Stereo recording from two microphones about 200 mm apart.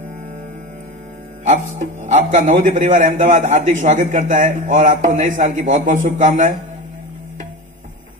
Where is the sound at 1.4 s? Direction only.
35° right (ahead or behind).